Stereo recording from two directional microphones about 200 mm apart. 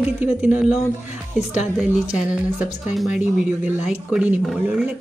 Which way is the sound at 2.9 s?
Centre (ahead or behind).